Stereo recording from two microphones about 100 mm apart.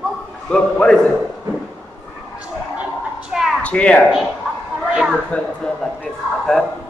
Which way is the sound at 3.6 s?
10° left (ahead or behind).